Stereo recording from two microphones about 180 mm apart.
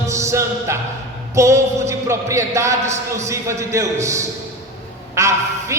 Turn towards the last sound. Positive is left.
turn(degrees=-15)  # may be behind; listen again after turning